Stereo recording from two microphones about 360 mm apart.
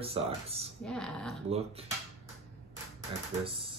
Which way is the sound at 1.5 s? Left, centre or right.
Centre.